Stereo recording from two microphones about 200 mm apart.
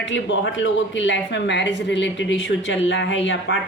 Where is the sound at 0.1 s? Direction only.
65° left (ahead or behind).